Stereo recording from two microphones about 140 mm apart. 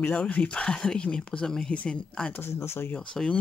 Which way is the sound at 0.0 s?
10° left (ahead or behind).